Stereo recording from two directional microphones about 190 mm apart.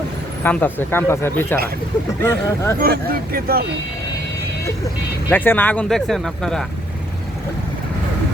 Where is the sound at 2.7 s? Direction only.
50° right (ahead or behind).